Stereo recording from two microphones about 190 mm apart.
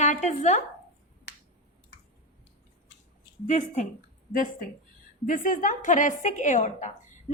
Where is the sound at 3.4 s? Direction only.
40° left (ahead or behind).